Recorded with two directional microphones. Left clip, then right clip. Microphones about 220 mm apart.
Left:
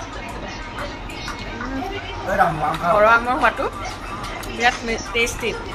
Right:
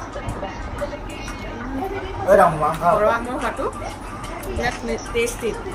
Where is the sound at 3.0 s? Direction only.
5° right (ahead or behind).